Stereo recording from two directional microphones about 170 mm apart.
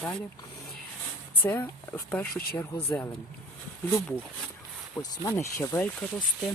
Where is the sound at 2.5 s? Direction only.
10° left (ahead or behind).